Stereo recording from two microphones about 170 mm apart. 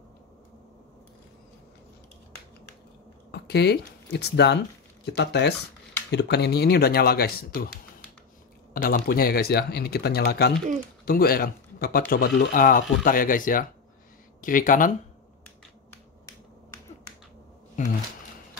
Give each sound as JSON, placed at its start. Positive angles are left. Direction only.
{"t": 3.3, "sound": "speech", "side_deg": 75}
{"t": 11.1, "sound": "speech", "side_deg": 60}